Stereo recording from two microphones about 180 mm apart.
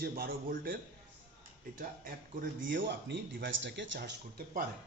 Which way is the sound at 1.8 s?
50° right (ahead or behind).